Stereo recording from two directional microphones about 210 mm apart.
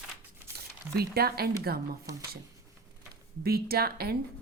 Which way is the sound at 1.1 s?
50° right (ahead or behind).